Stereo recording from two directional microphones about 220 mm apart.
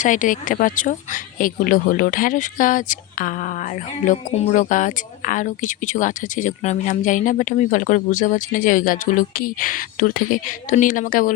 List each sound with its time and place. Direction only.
0.0 s speech: 35° left (ahead or behind)